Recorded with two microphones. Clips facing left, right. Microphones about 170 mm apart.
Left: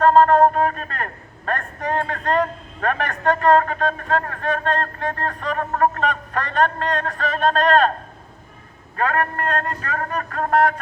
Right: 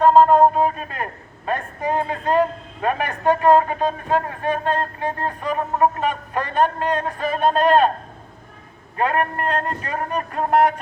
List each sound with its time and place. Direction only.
0.0 s speech: 10° right (ahead or behind)
9.0 s a man's voice: 20° right (ahead or behind)